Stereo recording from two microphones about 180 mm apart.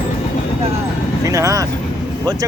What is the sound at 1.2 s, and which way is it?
Speech, 15° right (ahead or behind).